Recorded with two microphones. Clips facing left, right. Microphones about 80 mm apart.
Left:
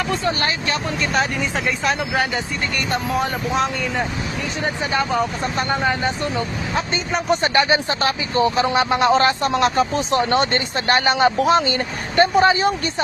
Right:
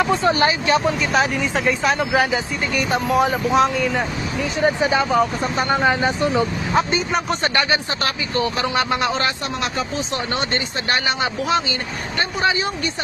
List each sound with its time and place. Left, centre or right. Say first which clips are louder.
0.0 s speech: right 5 dB; centre
0.9 s speech: right 2 dB; centre
4.6 s speech: right 4 dB; centre
7.4 s speech: left 3 dB; left